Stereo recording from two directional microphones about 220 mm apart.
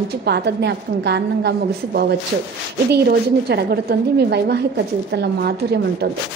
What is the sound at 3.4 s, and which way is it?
A woman's voice, 45° right (ahead or behind).